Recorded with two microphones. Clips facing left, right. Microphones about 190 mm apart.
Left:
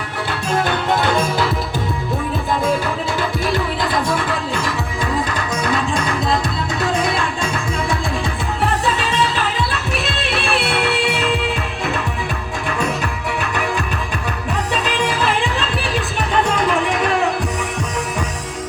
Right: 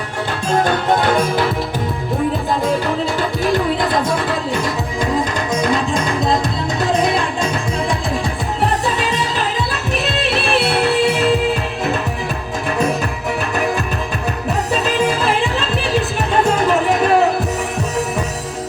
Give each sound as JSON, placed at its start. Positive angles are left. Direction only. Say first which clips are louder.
{"t": 0.5, "sound": "music", "louder": "right 3 dB", "side_deg": -45}
{"t": 9.9, "sound": "music", "louder": "right 3 dB", "side_deg": -40}
{"t": 16.5, "sound": "music", "louder": "right 3 dB", "side_deg": -40}